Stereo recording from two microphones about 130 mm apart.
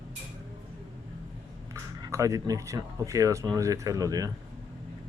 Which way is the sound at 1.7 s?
25° right (ahead or behind).